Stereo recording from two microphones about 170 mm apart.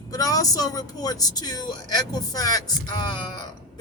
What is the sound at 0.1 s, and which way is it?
A man's voice, 20° left (ahead or behind).